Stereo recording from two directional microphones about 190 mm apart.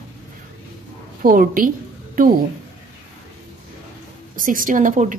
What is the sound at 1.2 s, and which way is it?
A woman's voice, 45° right (ahead or behind).